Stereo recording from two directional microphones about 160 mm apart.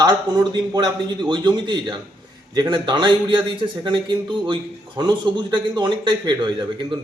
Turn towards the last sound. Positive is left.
turn(degrees=-25)  # may be behind; listen again after turning